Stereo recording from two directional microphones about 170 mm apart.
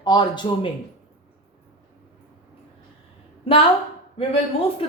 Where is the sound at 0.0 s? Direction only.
25° left (ahead or behind).